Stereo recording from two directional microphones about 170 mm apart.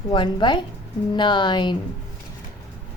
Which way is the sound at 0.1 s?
30° left (ahead or behind).